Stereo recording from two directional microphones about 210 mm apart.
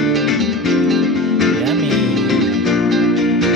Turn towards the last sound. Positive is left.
turn(degrees=0)  # may be behind; listen again after turning